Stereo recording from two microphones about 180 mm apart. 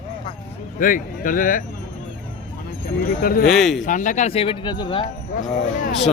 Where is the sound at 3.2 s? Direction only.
55° left (ahead or behind).